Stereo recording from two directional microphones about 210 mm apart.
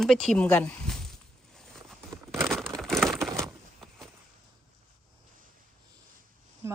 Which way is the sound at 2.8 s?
Centre (ahead or behind).